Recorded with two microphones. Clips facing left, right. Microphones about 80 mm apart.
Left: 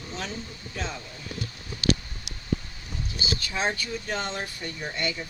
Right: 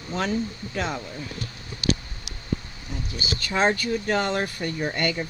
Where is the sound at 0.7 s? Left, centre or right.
Right.